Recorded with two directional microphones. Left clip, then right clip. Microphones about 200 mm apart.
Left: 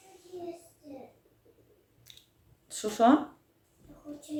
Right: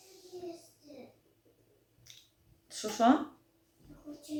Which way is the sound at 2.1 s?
10° left (ahead or behind).